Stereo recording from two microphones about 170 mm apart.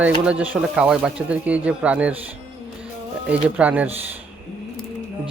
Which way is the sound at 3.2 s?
10° right (ahead or behind).